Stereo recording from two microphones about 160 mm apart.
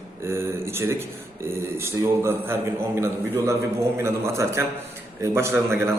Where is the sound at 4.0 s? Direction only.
15° right (ahead or behind).